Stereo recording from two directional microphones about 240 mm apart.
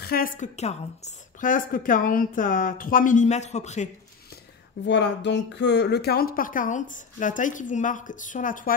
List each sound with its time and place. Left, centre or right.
0.0 s a woman's voice: left
4.8 s a woman's voice: left